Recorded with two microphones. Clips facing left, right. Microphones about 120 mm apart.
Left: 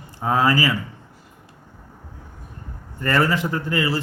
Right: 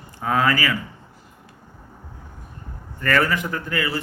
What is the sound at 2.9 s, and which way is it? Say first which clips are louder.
A man's voice: left 1 dB; 25° left (ahead or behind).